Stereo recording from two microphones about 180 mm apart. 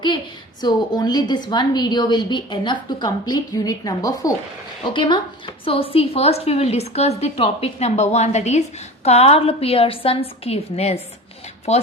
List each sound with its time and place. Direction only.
0.6 s a woman's voice: 20° left (ahead or behind)